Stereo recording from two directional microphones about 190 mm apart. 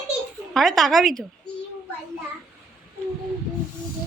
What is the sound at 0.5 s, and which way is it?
Speech, centre (ahead or behind).